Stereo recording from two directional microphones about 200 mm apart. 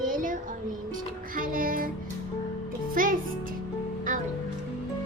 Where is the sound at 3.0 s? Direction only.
45° right (ahead or behind).